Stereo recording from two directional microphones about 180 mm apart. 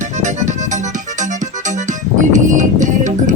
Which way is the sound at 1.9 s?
45° right (ahead or behind).